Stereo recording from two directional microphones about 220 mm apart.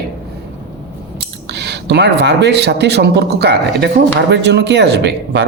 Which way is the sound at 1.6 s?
50° right (ahead or behind).